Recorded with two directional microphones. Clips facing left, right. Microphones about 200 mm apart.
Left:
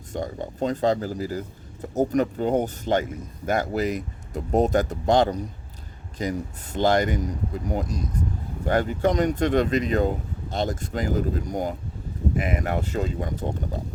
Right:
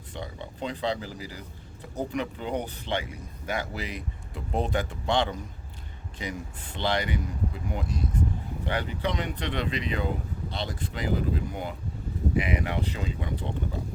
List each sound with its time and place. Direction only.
0.1 s speech: 45° left (ahead or behind)